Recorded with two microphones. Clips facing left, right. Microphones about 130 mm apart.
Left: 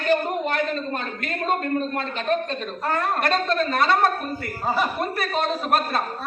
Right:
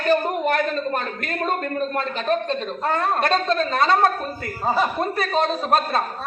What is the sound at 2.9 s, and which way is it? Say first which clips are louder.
A woman's voice: right 2 dB; 25° right (ahead or behind).